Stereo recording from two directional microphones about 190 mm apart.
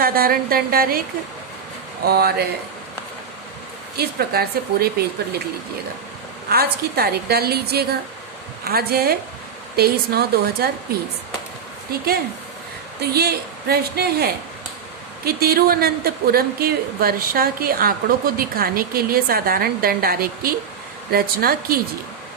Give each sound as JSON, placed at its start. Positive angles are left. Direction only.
{"t": 0.0, "sound": "a woman's voice", "side_deg": -50}
{"t": 2.0, "sound": "a woman's voice", "side_deg": -55}
{"t": 3.9, "sound": "a woman's voice", "side_deg": -55}
{"t": 6.5, "sound": "a woman's voice", "side_deg": -55}
{"t": 11.9, "sound": "a woman's voice", "side_deg": -55}